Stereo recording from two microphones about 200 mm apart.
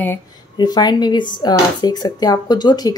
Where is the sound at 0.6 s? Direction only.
20° left (ahead or behind).